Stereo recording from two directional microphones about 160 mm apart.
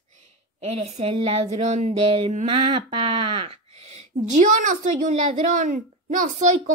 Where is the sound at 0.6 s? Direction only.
40° right (ahead or behind).